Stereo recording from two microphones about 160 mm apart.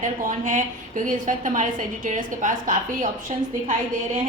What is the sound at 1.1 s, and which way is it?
A woman's voice, 55° right (ahead or behind).